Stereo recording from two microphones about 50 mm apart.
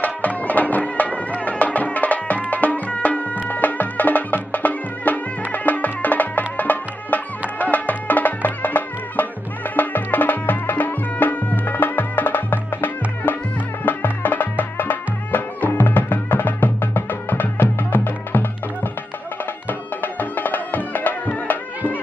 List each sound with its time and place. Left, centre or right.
0.4 s music: left
20.0 s music: left